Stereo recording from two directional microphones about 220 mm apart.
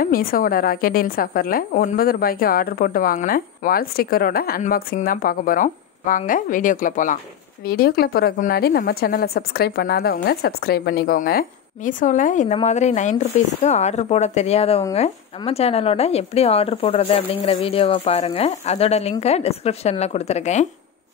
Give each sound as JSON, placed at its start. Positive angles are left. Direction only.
{"t": 0.0, "sound": "a woman's voice", "side_deg": 40}